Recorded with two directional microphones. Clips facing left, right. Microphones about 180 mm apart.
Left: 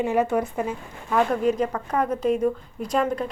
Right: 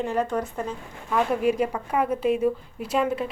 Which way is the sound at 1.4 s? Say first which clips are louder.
Even; 10° right (ahead or behind).